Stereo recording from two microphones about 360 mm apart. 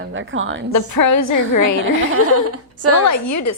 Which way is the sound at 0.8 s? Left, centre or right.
Left.